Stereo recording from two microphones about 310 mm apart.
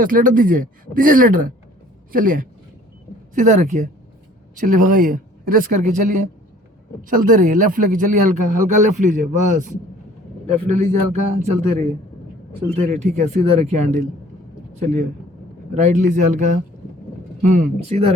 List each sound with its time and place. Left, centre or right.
0.0 s speech: right
8.4 s a man's voice: right
8.8 s speech: right
10.4 s speech: right
12.9 s speech: right